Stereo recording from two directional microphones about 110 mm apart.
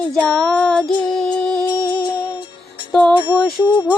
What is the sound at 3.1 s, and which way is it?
Music, 45° left (ahead or behind).